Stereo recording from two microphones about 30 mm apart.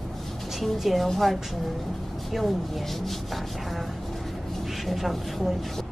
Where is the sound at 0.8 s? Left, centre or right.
Centre.